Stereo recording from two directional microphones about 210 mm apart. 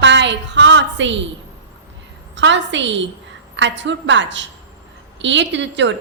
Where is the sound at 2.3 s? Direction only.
60° right (ahead or behind).